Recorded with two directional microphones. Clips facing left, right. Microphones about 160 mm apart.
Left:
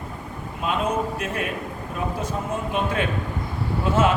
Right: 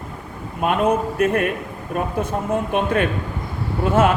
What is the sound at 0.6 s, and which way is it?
A man's voice, 55° right (ahead or behind).